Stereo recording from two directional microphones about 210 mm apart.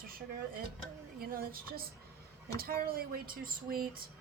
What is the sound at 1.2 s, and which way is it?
A woman's voice, 45° right (ahead or behind).